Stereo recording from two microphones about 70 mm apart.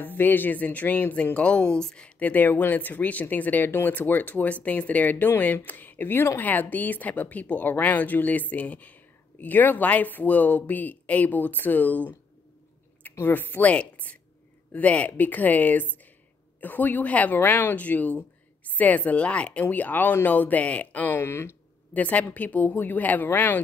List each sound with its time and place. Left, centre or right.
0.0 s a woman's voice: left
21.2 s speech: left
21.9 s speech: left